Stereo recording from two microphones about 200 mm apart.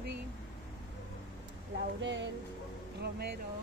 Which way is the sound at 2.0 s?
65° right (ahead or behind).